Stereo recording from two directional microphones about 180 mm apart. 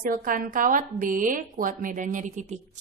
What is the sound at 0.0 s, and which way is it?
A woman's voice, 50° right (ahead or behind).